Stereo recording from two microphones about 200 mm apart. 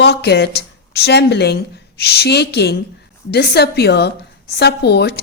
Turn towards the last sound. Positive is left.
turn(degrees=55)  # may be behind; listen again after turning